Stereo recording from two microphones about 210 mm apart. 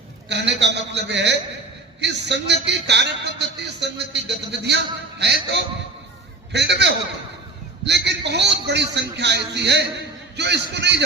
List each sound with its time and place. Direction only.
0.3 s a man's voice: 55° right (ahead or behind)
5.2 s a man's voice: 55° right (ahead or behind)